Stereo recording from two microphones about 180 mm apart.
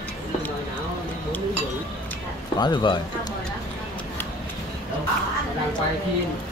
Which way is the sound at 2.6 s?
25° left (ahead or behind).